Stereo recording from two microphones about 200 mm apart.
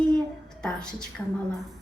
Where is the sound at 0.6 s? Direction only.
5° left (ahead or behind).